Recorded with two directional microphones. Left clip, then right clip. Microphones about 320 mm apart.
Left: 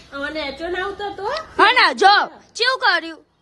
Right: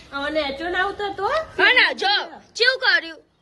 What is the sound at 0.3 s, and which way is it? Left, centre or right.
Speech, centre.